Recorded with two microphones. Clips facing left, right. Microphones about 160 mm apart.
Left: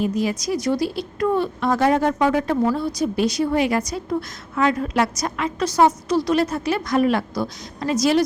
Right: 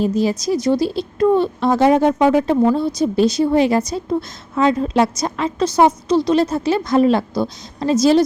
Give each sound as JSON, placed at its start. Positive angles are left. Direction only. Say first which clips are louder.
{"t": 0.0, "sound": "a woman's voice", "louder": "right 4 dB", "side_deg": -30}